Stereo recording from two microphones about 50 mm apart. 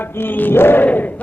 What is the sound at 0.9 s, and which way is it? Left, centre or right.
Battle cry, left.